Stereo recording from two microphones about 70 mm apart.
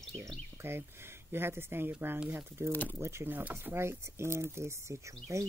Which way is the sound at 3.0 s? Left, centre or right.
Right.